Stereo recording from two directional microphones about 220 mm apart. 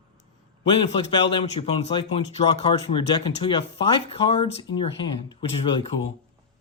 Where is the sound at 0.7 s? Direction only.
20° left (ahead or behind).